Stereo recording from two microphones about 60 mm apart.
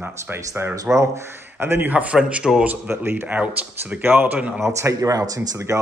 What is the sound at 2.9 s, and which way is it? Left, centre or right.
Speech, right.